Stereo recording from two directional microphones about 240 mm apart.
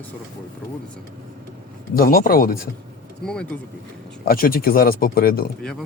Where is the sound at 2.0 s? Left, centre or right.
Left.